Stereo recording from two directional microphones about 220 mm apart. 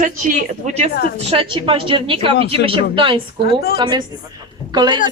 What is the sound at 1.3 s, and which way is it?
A woman's voice, 25° right (ahead or behind).